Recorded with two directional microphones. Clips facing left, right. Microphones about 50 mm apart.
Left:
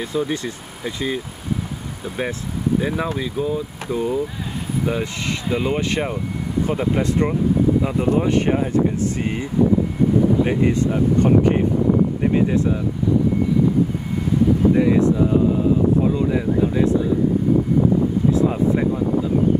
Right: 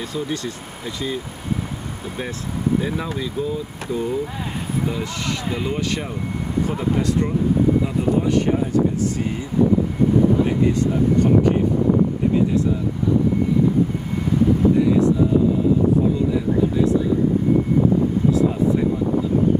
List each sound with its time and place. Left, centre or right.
0.0 s speech: left
2.8 s speech: centre
4.8 s speech: left
14.8 s speech: left
16.3 s speech: left
18.3 s speech: left